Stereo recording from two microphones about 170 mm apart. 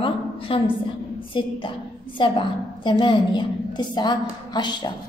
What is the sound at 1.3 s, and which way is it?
A woman's voice, 30° left (ahead or behind).